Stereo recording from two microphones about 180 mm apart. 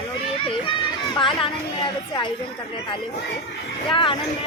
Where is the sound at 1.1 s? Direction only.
30° left (ahead or behind).